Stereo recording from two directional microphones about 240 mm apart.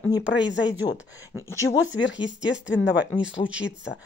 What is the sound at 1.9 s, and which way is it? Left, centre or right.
Speech, left.